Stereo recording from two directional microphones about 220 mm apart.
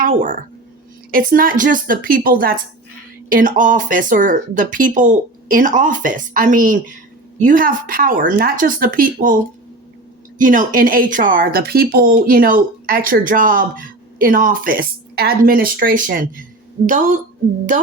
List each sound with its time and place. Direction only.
0.0 s a woman's voice: 40° right (ahead or behind)